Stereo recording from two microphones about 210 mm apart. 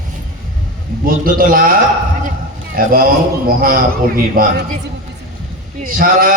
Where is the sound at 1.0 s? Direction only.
45° right (ahead or behind).